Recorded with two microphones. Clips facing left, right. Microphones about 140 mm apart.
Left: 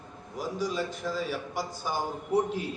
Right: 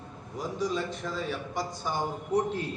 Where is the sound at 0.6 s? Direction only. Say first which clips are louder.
Right 1 dB; centre (ahead or behind).